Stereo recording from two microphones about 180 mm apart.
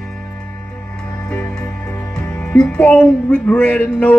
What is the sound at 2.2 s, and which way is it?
Speech, 5° left (ahead or behind).